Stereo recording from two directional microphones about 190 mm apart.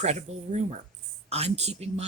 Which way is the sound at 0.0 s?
35° right (ahead or behind).